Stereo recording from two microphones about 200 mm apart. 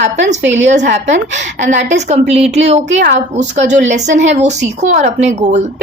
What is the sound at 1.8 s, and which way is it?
A woman's voice, 35° right (ahead or behind).